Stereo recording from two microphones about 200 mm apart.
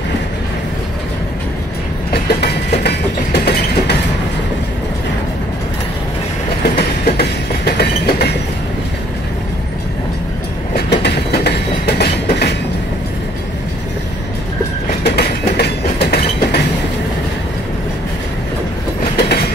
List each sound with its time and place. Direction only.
2.2 s train: 55° left (ahead or behind)
7.1 s train: 55° left (ahead or behind)
10.9 s train: 55° left (ahead or behind)
15.0 s train: 55° left (ahead or behind)
19.1 s train: 55° left (ahead or behind)